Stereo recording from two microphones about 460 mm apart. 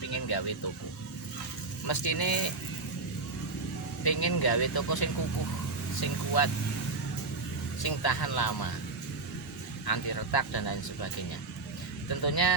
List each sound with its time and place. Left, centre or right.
0.1 s vehicle: left
1.9 s speech: left
4.0 s speech: left
7.8 s speech: left
9.8 s speech: left